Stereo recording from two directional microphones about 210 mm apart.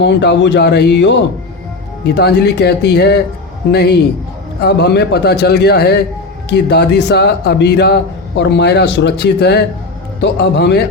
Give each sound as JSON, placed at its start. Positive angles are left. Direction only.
{"t": 0.0, "sound": "speech", "side_deg": 55}
{"t": 2.1, "sound": "speech", "side_deg": 50}